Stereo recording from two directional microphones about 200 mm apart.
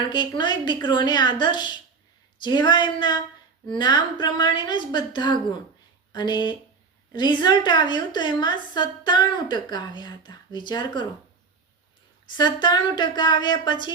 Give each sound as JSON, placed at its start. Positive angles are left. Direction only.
{"t": 0.1, "sound": "a woman's voice", "side_deg": 20}
{"t": 12.4, "sound": "a woman's voice", "side_deg": 20}